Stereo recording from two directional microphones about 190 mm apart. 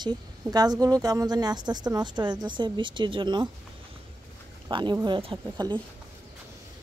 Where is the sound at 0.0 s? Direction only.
20° right (ahead or behind).